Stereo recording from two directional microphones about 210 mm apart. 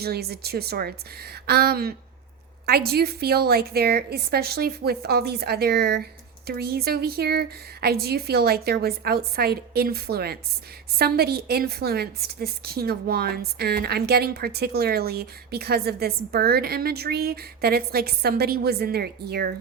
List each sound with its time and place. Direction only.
0.0 s a woman's voice: 50° right (ahead or behind)